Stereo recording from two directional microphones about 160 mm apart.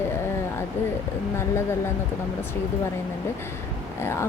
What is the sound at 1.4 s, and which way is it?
Speech, 15° left (ahead or behind).